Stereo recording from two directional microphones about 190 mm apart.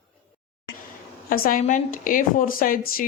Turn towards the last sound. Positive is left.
turn(degrees=50)  # may be behind; listen again after turning